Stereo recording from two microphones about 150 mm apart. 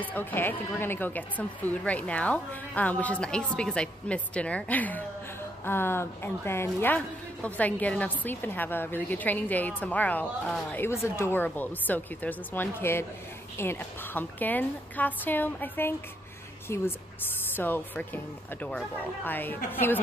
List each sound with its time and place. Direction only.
0.0 s a woman's voice: 10° left (ahead or behind)